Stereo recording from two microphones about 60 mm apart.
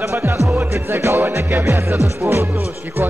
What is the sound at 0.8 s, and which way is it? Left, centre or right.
Music, right.